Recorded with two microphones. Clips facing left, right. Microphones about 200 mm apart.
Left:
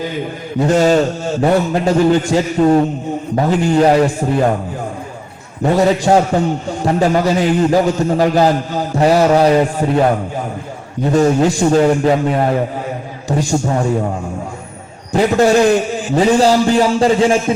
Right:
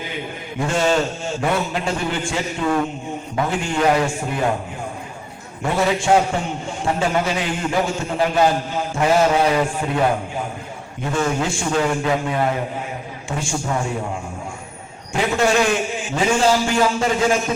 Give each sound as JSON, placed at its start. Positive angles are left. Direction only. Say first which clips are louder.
{"t": 0.6, "sound": "a man's voice", "louder": "left 7 dB", "side_deg": 40}
{"t": 5.6, "sound": "a man's voice", "louder": "left 6 dB", "side_deg": 40}
{"t": 11.0, "sound": "a man's voice", "louder": "left 9 dB", "side_deg": 35}
{"t": 15.1, "sound": "a man's voice", "louder": "left 7 dB", "side_deg": 35}